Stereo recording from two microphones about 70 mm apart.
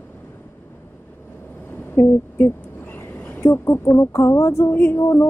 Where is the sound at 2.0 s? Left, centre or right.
Left.